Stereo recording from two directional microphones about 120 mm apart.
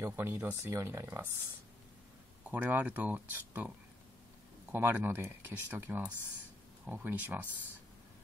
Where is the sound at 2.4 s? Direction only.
15° right (ahead or behind).